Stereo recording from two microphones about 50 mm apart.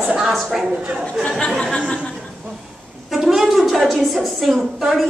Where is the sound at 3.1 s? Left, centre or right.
Centre.